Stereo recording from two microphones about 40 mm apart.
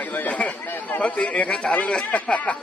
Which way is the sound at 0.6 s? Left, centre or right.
Left.